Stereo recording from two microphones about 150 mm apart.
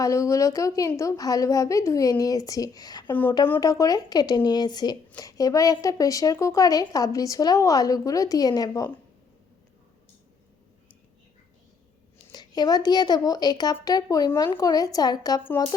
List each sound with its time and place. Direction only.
0.0 s speech: 20° left (ahead or behind)
3.1 s a woman's voice: 10° left (ahead or behind)
3.6 s speech: 25° left (ahead or behind)
12.3 s speech: 30° left (ahead or behind)